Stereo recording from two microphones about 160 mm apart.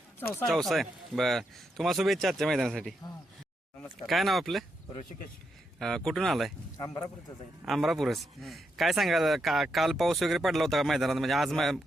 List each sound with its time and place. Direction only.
0.4 s a man's voice: centre (ahead or behind)
5.8 s a man's voice: 5° left (ahead or behind)
6.7 s a man's voice: 20° left (ahead or behind)
7.6 s a man's voice: centre (ahead or behind)